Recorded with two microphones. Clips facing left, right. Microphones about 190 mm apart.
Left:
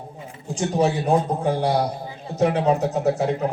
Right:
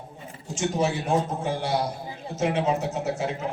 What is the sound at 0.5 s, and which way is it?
A man's voice, 35° left (ahead or behind).